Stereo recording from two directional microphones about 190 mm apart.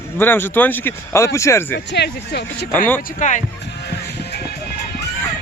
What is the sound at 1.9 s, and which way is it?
Speech, 60° left (ahead or behind).